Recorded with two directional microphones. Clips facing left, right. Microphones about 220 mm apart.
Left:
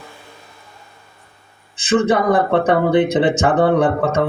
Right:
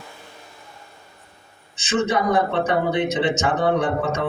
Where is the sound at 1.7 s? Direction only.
55° left (ahead or behind).